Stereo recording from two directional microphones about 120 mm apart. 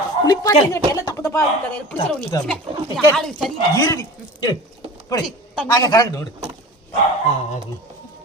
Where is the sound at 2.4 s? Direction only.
5° left (ahead or behind).